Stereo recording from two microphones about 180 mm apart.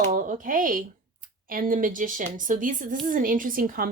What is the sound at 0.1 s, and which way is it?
A woman's voice, 45° right (ahead or behind).